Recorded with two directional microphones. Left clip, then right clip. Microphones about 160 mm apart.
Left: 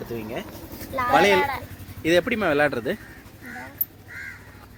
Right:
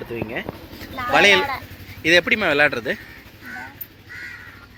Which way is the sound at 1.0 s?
20° left (ahead or behind).